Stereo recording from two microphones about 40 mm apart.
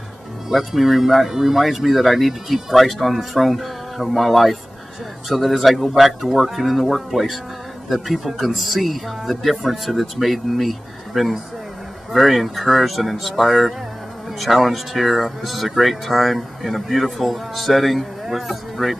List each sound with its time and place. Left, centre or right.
0.5 s speech: centre